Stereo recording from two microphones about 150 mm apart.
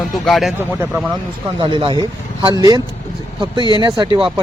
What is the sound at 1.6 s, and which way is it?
Speech, 35° right (ahead or behind).